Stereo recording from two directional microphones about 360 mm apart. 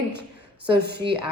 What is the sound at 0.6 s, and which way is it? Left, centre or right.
Speech, right.